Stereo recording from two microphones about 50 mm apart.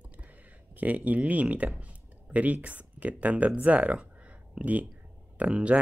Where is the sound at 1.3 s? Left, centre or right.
Right.